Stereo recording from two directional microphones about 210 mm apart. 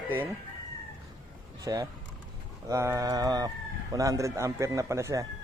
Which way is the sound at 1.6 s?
15° right (ahead or behind).